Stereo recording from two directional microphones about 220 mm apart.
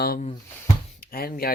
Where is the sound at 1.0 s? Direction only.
40° left (ahead or behind).